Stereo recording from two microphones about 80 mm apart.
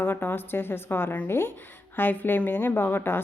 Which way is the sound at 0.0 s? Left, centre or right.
Left.